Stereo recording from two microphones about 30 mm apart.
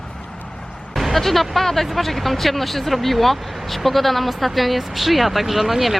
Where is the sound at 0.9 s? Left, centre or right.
Centre.